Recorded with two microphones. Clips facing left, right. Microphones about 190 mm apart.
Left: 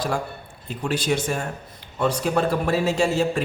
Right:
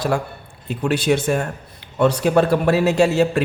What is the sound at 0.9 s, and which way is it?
A man's voice, 60° right (ahead or behind).